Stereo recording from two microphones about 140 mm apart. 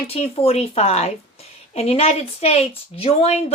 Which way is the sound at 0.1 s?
45° left (ahead or behind).